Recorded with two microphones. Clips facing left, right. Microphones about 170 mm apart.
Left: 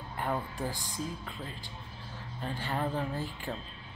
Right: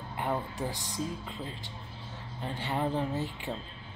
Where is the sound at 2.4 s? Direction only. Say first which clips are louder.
Right 2 dB; 20° right (ahead or behind).